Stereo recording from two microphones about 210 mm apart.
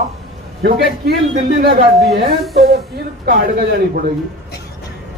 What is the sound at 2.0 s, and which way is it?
Speech, 45° right (ahead or behind).